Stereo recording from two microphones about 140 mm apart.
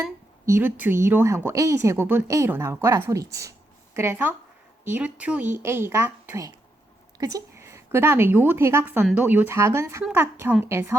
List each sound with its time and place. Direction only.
0.4 s a woman's voice: 15° right (ahead or behind)
7.2 s a woman's voice: 25° right (ahead or behind)